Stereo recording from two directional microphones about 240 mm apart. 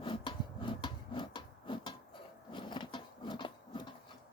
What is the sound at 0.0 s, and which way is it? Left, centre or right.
Rub, left.